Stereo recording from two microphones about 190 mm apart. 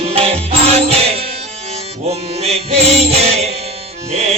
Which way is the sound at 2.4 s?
35° right (ahead or behind).